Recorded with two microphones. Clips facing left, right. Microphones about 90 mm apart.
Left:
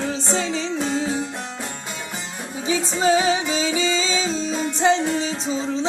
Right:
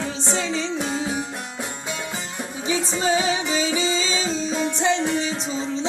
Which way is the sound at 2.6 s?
35° right (ahead or behind).